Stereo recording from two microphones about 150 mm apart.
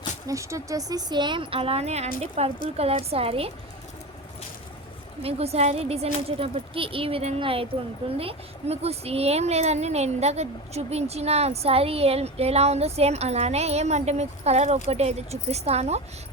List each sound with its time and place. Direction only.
0.3 s a woman's voice: 20° right (ahead or behind); by 3.5 s 40° right (ahead or behind)
5.2 s a woman's voice: 45° right (ahead or behind)